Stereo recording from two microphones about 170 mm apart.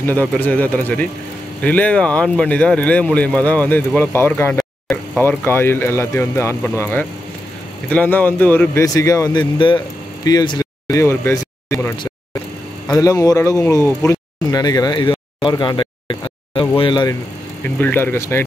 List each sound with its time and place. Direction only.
0.0 s speech: 10° left (ahead or behind)
5.2 s speech: 10° left (ahead or behind)
12.9 s speech: 20° left (ahead or behind)
17.6 s speech: 10° left (ahead or behind)